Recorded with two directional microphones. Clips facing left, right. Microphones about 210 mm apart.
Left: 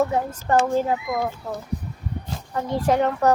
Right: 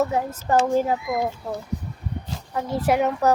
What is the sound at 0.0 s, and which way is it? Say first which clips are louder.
A child's voice: left 1 dB; 5° right (ahead or behind).